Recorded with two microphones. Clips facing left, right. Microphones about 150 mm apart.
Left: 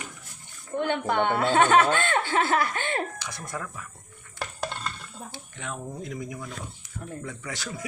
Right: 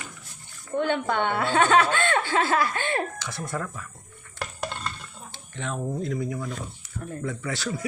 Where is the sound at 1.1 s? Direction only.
45° left (ahead or behind).